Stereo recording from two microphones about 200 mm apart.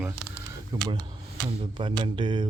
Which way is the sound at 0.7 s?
20° right (ahead or behind).